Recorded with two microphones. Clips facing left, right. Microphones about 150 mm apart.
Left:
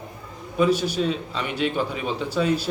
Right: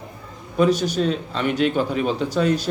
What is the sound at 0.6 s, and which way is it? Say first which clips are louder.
A man's voice: right 2 dB; 5° left (ahead or behind).